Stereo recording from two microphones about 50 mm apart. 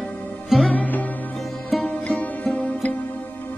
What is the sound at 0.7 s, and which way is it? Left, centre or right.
Music, left.